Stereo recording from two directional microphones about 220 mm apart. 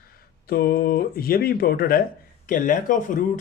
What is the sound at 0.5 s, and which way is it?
Speech, 40° left (ahead or behind).